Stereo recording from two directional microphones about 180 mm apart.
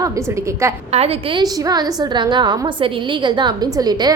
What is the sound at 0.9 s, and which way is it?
A woman's voice, 30° right (ahead or behind).